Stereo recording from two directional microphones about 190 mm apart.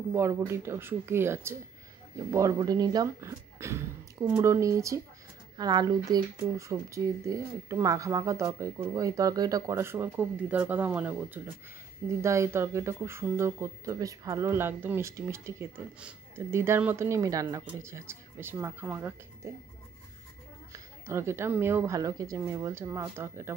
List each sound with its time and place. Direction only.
0.1 s speech: 15° right (ahead or behind)
20.7 s speech: 15° right (ahead or behind)